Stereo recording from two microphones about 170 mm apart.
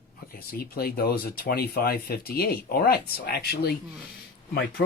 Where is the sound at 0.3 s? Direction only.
60° left (ahead or behind).